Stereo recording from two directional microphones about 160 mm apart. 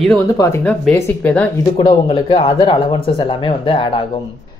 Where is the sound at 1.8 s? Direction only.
30° left (ahead or behind).